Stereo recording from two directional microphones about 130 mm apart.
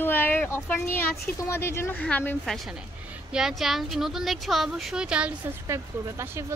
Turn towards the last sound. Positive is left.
turn(degrees=-20)  # may be behind; listen again after turning